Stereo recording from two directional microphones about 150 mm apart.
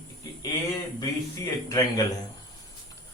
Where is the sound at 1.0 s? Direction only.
25° left (ahead or behind).